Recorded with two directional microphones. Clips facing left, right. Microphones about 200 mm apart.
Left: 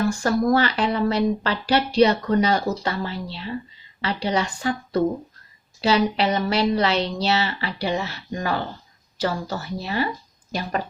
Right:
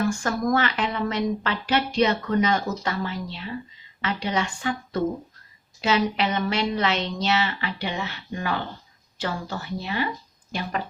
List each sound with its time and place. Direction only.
0.1 s speech: 35° left (ahead or behind)